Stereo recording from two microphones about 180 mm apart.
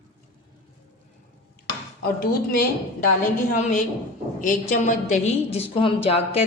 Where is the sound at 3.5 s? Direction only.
45° left (ahead or behind).